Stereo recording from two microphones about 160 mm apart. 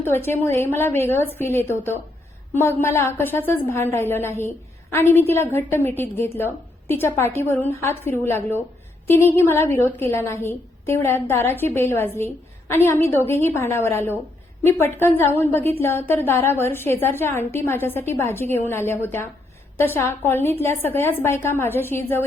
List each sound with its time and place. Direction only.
0.0 s a woman's voice: 15° left (ahead or behind)